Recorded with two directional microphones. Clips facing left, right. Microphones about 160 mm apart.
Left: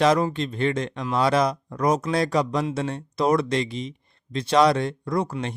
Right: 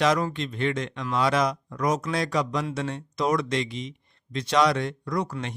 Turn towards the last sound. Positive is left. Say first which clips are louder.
# left 3 dB
turn(degrees=30)  # may be behind; listen again after turning